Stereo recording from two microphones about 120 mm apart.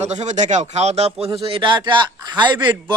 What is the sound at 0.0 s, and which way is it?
A man's voice, 70° right (ahead or behind).